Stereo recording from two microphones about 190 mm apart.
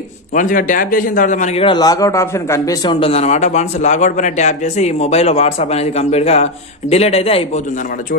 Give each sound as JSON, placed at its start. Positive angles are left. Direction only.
{"t": 0.3, "sound": "a man's voice", "side_deg": 45}